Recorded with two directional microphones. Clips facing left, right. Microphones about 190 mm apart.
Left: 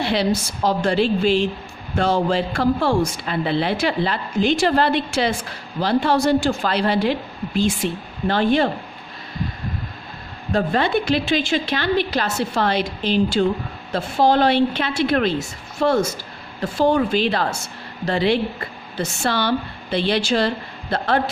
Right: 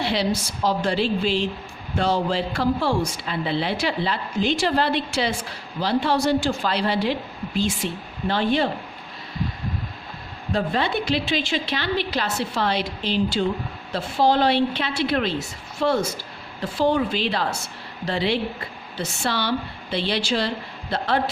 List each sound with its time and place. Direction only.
0.0 s a woman's voice: 50° left (ahead or behind)
10.5 s a woman's voice: 50° left (ahead or behind)